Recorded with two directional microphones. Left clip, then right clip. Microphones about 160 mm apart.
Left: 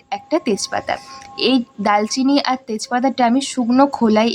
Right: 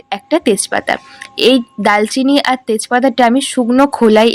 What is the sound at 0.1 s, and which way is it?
Speech, 25° right (ahead or behind).